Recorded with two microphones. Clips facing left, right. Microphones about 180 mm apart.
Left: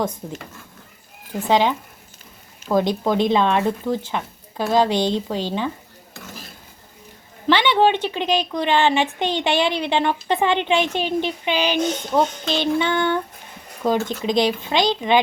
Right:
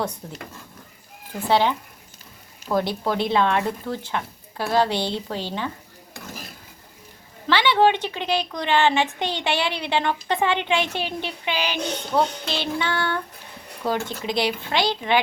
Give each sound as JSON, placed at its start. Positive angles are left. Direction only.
{"t": 0.2, "sound": "speech", "side_deg": 10}
{"t": 1.5, "sound": "speech", "side_deg": 15}
{"t": 2.7, "sound": "speech", "side_deg": 20}
{"t": 7.4, "sound": "a woman's voice", "side_deg": 20}